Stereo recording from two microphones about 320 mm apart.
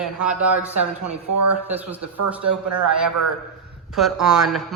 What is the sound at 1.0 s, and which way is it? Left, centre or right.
Speech, right.